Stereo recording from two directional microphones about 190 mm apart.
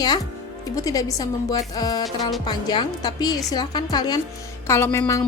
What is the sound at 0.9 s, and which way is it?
Speech, 20° left (ahead or behind).